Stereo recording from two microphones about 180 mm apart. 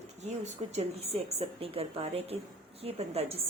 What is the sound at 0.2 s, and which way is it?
A woman's voice, 40° right (ahead or behind).